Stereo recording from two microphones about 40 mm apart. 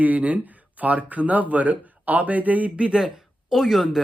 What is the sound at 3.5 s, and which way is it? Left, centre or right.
Speech, centre.